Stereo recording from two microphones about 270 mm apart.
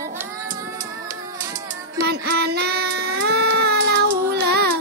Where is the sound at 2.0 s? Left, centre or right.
Right.